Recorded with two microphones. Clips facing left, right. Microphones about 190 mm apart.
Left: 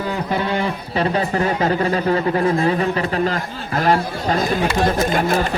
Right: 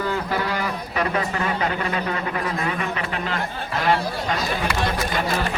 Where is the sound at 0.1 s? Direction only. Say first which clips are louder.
Left 3 dB; 20° left (ahead or behind).